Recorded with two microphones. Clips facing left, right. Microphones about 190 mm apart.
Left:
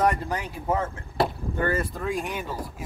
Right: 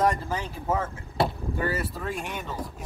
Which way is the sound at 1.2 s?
5° right (ahead or behind).